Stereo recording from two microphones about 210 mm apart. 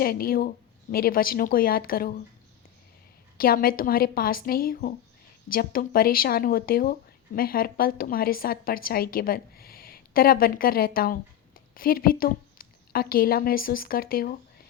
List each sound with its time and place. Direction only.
0.0 s speech: 45° left (ahead or behind)
3.3 s a woman's voice: 45° left (ahead or behind)